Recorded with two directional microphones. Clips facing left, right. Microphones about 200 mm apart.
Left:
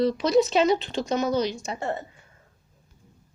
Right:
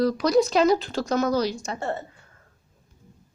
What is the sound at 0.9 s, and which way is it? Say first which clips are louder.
A woman's voice: right 1 dB; 20° left (ahead or behind).